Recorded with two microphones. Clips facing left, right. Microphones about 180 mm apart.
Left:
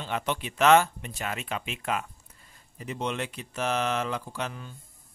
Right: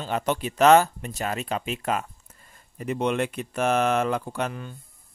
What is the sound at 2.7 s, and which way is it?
Speech, 55° right (ahead or behind).